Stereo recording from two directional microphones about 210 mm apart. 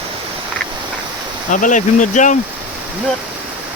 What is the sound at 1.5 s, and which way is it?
Speech, 35° left (ahead or behind).